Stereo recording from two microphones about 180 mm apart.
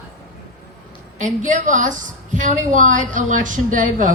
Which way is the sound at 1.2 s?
45° right (ahead or behind).